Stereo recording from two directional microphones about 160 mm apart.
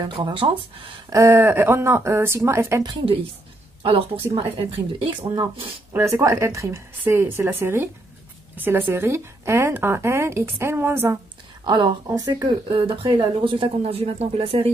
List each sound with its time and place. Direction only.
0.0 s speech: 30° right (ahead or behind)
1.1 s speech: 15° right (ahead or behind)
2.8 s speech: 25° right (ahead or behind)
5.2 s speech: 25° right (ahead or behind)
11.6 s speech: 30° right (ahead or behind)